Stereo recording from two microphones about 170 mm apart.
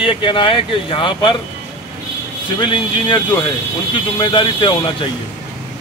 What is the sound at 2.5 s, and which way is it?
Speech, 30° left (ahead or behind).